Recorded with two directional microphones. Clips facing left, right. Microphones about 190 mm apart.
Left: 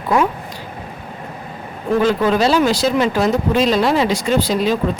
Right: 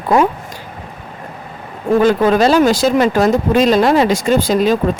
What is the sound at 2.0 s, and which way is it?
Speech, 45° right (ahead or behind).